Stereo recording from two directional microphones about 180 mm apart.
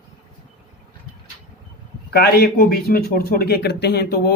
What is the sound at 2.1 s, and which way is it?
Speech, 60° left (ahead or behind).